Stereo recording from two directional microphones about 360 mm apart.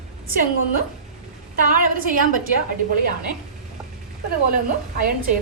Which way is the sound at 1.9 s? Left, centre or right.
Right.